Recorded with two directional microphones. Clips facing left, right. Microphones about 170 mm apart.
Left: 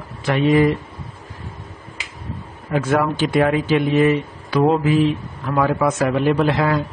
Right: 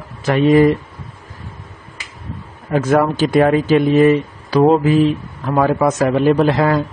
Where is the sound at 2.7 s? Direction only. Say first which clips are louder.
Right 4 dB; 40° right (ahead or behind).